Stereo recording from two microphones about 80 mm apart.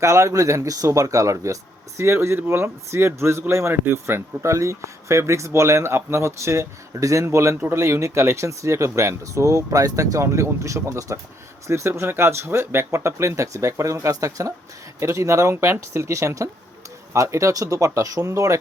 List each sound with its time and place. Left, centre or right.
0.0 s a man's voice: right